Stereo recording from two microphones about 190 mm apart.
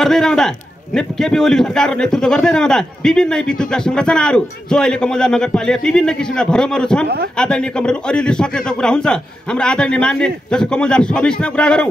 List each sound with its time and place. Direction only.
0.0 s a man's voice: centre (ahead or behind)